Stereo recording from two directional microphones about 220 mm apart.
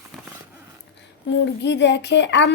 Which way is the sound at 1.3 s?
55° left (ahead or behind).